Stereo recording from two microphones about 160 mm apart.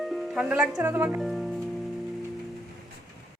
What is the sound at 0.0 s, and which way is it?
Speech, centre (ahead or behind).